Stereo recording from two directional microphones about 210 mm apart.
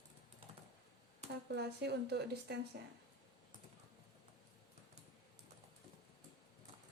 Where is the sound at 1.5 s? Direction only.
50° right (ahead or behind).